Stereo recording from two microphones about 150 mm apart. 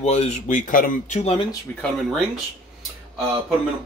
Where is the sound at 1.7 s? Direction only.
15° left (ahead or behind).